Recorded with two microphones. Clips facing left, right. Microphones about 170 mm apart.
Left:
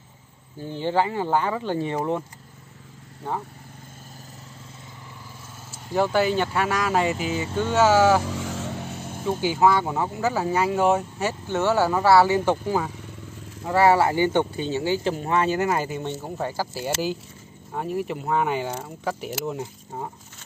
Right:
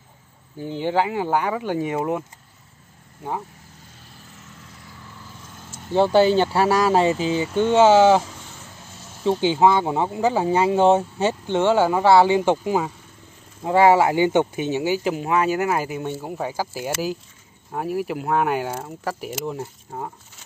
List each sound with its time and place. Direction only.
0.6 s speech: 15° right (ahead or behind)
5.9 s speech: 30° right (ahead or behind)
8.3 s vehicle: 85° left; by 9.2 s 60° left (ahead or behind)
9.2 s speech: 25° right (ahead or behind); by 20.1 s centre (ahead or behind)